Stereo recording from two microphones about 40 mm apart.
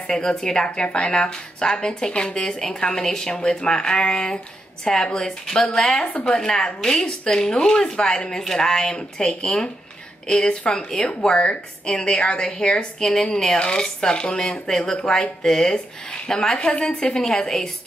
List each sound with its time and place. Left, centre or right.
0.0 s a woman's voice: centre
9.2 s a woman's voice: left
10.7 s a woman's voice: centre
13.1 s a woman's voice: centre
13.6 s a woman's voice: left
15.0 s a woman's voice: centre
16.5 s a woman's voice: left; by 17.6 s centre